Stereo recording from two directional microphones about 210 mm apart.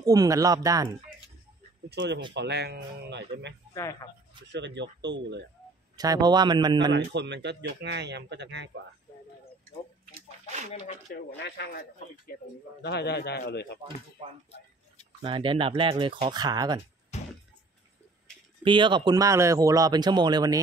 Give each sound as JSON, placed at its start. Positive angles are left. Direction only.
{"t": 0.0, "sound": "speech", "side_deg": -15}
{"t": 1.9, "sound": "a man's voice", "side_deg": -50}
{"t": 3.7, "sound": "speech", "side_deg": 15}
{"t": 4.5, "sound": "a man's voice", "side_deg": -55}
{"t": 5.9, "sound": "speech", "side_deg": -20}
{"t": 6.9, "sound": "a man's voice", "side_deg": -55}
{"t": 11.3, "sound": "a man's voice", "side_deg": 55}
{"t": 15.2, "sound": "speech", "side_deg": -25}
{"t": 17.1, "sound": "a sound", "side_deg": 35}
{"t": 18.6, "sound": "speech", "side_deg": -20}